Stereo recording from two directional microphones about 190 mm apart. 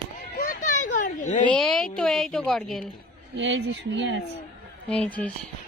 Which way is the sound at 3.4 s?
75° right (ahead or behind).